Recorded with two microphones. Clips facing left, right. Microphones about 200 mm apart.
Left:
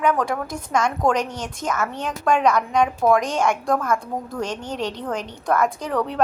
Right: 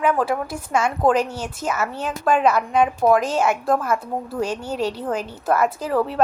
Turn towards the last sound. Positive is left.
turn(degrees=-5)  # may be behind; listen again after turning